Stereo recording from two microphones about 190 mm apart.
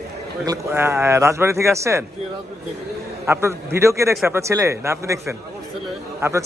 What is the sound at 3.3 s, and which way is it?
Speech, 15° right (ahead or behind).